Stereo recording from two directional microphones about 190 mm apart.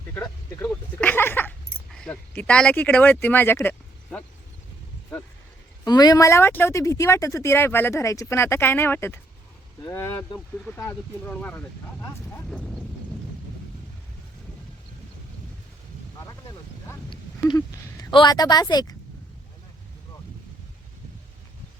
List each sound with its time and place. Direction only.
0.1 s speech: 15° left (ahead or behind)
5.8 s speech: 20° left (ahead or behind); by 12.8 s centre (ahead or behind)
16.2 s a sound: 15° left (ahead or behind)
18.1 s speech: 25° left (ahead or behind)